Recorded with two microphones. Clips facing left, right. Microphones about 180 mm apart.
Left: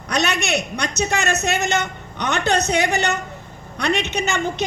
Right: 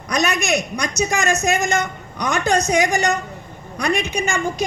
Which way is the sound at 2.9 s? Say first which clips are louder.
Right 2 dB; 65° left (ahead or behind).